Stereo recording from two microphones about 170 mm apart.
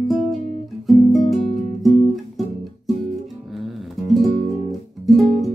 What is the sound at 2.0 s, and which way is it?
Guitar, centre (ahead or behind).